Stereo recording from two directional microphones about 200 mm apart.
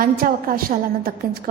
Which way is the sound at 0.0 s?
45° right (ahead or behind).